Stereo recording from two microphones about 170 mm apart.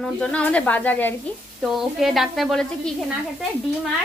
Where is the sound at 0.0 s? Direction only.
5° left (ahead or behind).